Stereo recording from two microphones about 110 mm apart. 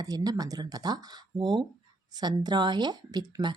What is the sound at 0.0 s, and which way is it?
Speech, 35° right (ahead or behind).